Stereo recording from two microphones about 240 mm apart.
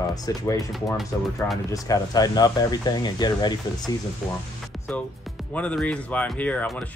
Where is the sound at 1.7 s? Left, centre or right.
Centre.